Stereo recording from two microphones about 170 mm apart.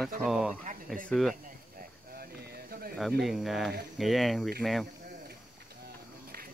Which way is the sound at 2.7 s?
60° right (ahead or behind).